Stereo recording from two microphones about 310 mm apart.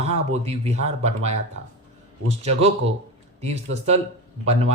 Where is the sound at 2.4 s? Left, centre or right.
Centre.